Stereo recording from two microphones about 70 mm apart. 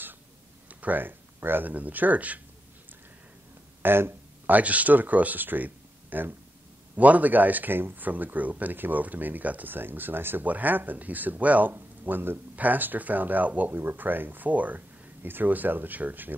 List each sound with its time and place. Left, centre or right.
0.7 s speech: right
3.8 s speech: right